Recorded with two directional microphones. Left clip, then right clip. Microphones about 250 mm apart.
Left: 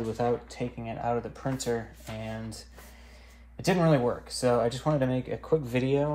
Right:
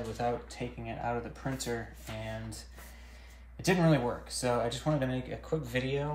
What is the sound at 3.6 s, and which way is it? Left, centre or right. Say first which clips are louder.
Speech: left 4 dB; left.